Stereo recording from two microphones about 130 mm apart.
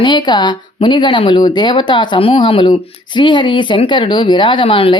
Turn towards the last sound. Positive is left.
turn(degrees=40)  # may be behind; listen again after turning